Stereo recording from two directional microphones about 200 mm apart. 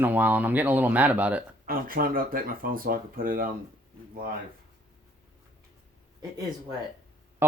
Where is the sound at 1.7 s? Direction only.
45° right (ahead or behind).